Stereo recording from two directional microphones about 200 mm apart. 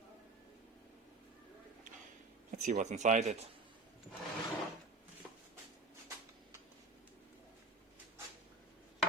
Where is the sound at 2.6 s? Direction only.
35° right (ahead or behind).